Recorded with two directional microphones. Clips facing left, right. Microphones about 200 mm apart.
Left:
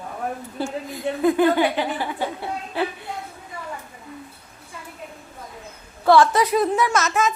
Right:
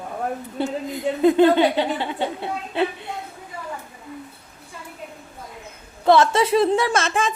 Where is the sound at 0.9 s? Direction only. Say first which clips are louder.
Right 3 dB; 20° right (ahead or behind).